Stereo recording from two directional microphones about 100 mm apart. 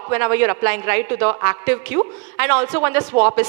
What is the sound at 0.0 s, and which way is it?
Speech, 25° right (ahead or behind).